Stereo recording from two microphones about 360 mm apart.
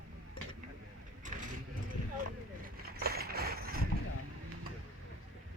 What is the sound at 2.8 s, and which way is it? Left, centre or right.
Mechanisms, right.